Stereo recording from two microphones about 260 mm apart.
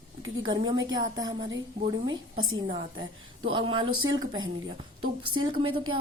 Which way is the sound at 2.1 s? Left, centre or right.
Right.